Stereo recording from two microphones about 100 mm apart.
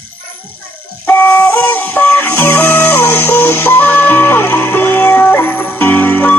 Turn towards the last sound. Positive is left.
turn(degrees=20)  # may be behind; listen again after turning